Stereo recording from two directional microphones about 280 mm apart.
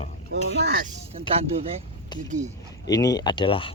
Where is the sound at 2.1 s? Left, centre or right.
Centre.